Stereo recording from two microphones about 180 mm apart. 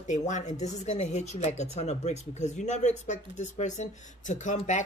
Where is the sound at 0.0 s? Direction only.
40° left (ahead or behind).